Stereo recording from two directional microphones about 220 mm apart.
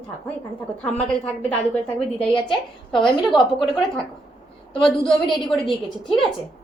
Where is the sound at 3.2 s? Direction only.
Centre (ahead or behind).